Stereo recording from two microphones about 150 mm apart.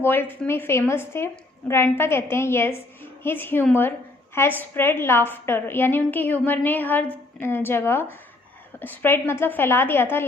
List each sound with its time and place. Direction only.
0.0 s a woman's voice: 15° left (ahead or behind)